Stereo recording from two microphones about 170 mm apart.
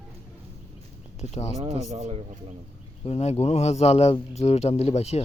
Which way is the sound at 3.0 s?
40° left (ahead or behind).